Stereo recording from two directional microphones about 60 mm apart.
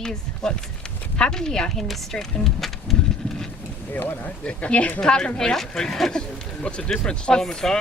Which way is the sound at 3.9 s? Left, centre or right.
Left.